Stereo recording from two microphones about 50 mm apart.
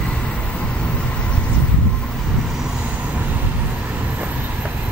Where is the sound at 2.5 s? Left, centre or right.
Centre.